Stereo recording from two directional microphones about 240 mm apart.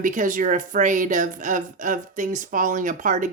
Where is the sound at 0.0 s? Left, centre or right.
Right.